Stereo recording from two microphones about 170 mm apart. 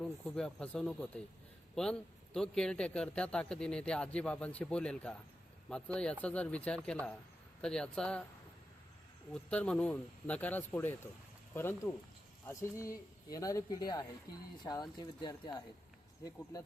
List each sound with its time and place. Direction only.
0.0 s a man's voice: 5° left (ahead or behind)
9.3 s speech: 5° left (ahead or behind); by 16.6 s 20° left (ahead or behind)